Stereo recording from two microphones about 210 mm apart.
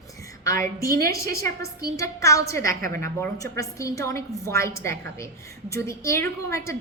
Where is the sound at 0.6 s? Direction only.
45° right (ahead or behind).